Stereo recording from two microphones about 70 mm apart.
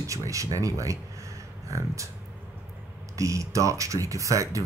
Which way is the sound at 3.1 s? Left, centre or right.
Right.